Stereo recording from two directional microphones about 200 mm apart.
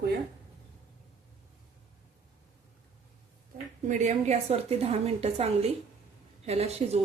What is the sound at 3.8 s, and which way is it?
A woman's voice, 35° right (ahead or behind).